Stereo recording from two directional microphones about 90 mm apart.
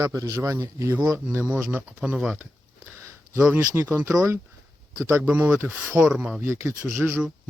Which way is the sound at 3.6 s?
30° right (ahead or behind).